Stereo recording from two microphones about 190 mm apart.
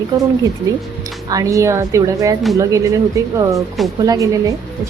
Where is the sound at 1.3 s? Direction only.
15° right (ahead or behind).